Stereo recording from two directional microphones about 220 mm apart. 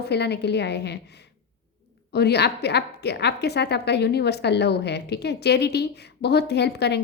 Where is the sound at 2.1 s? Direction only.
50° left (ahead or behind).